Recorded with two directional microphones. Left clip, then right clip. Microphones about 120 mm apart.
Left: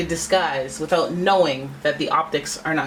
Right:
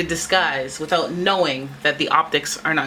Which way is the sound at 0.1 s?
40° right (ahead or behind).